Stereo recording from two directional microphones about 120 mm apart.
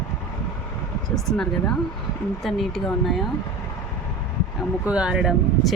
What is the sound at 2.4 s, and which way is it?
Speech, centre (ahead or behind).